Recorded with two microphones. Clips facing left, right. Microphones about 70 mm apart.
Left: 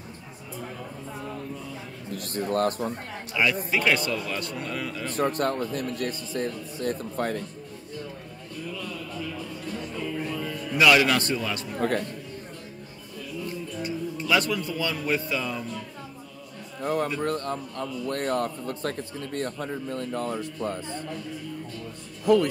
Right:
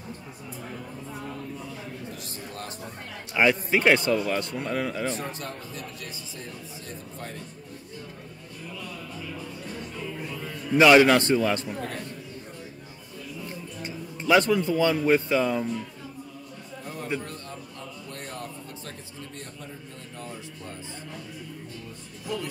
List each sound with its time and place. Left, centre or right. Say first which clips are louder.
2.0 s speech: left 9 dB; left
3.4 s speech: right 3 dB; right
5.1 s speech: left 9 dB; left
10.4 s a man's voice: right 3 dB; right
13.5 s speech: left 5 dB; right
16.8 s a man's voice: left 7 dB; left
22.2 s speech: left 13 dB; left